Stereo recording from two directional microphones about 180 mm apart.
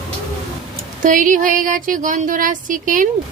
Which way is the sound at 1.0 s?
45° right (ahead or behind).